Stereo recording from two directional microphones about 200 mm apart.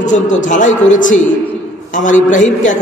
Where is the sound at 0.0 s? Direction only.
40° left (ahead or behind).